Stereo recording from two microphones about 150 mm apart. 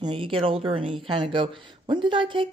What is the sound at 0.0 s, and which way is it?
Speech, 35° right (ahead or behind).